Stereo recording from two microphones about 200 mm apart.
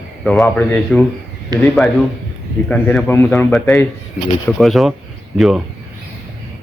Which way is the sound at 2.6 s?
5° left (ahead or behind).